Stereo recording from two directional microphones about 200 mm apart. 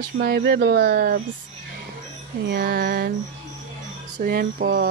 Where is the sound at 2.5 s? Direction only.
50° right (ahead or behind).